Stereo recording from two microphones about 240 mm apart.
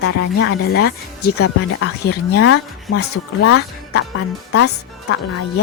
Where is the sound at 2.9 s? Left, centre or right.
Left.